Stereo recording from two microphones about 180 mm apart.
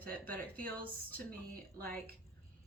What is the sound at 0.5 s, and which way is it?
Speech, 10° left (ahead or behind).